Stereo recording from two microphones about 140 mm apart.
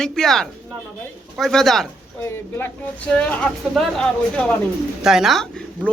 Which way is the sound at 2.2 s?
15° left (ahead or behind).